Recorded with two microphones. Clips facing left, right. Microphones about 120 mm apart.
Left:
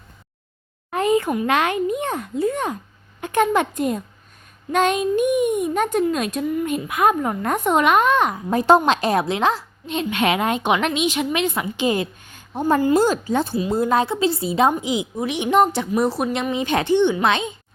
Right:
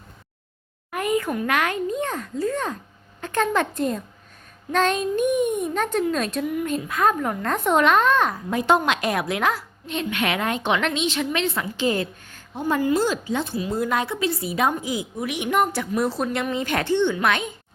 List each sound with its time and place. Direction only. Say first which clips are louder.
0.9 s a sound: left 5 dB; 25° left (ahead or behind)
1.5 s a woman's voice: left 4 dB; 20° left (ahead or behind)
8.4 s a woman's voice: left 7 dB; 35° left (ahead or behind); by 12.4 s 15° left (ahead or behind)
12.6 s a woman's voice: left 4 dB; 40° left (ahead or behind)
13.6 s a woman's voice: left 5 dB; 30° left (ahead or behind)
15.9 s speech: left 3 dB; 15° left (ahead or behind)